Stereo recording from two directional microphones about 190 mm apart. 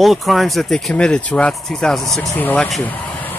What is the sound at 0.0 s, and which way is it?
Speech, centre (ahead or behind).